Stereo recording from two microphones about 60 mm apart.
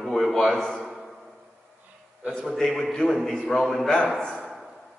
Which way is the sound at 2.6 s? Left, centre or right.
Centre.